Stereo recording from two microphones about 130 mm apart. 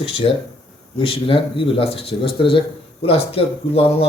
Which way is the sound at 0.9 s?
45° left (ahead or behind).